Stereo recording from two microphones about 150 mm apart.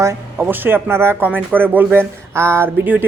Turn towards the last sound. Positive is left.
turn(degrees=-15)  # may be behind; listen again after turning